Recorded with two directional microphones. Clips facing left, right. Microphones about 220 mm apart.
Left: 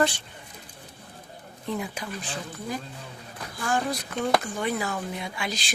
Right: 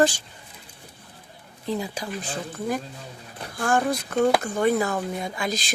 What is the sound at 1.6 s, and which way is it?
Speech, 30° right (ahead or behind).